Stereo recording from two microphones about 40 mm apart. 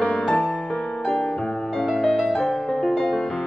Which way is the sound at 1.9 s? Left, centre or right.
Centre.